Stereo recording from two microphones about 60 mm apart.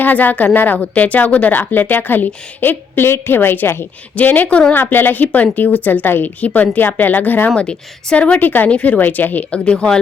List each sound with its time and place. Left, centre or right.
0.0 s a woman's voice: left
4.7 s a woman's voice: left
7.5 s a woman's voice: centre